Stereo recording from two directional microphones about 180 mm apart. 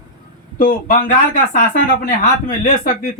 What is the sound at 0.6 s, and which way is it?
Speech, 50° left (ahead or behind).